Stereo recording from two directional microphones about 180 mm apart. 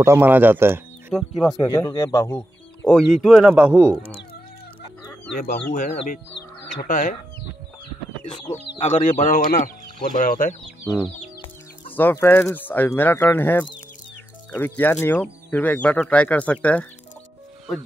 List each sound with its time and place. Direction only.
0.0 s speech: 15° right (ahead or behind)
1.1 s speech: centre (ahead or behind)
1.7 s speech: 20° left (ahead or behind)
2.9 s speech: centre (ahead or behind)
5.0 s chicken: 10° left (ahead or behind)
5.4 s speech: 50° left (ahead or behind)
8.5 s speech: 40° left (ahead or behind)
11.9 s speech: 10° left (ahead or behind)